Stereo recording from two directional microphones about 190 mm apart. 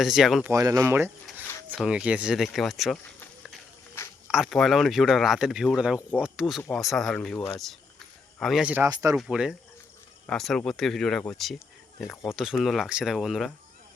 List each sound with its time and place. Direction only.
0.0 s speech: centre (ahead or behind)
0.5 s speech: 20° right (ahead or behind); by 3.0 s centre (ahead or behind)
4.3 s speech: centre (ahead or behind)
8.4 s speech: centre (ahead or behind); by 9.1 s 15° right (ahead or behind)
9.1 s speech: 5° right (ahead or behind)